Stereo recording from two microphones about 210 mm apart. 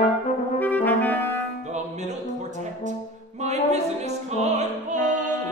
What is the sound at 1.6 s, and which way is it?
Music, 35° right (ahead or behind).